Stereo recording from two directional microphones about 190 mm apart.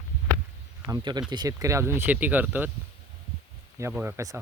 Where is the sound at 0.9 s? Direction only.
20° right (ahead or behind).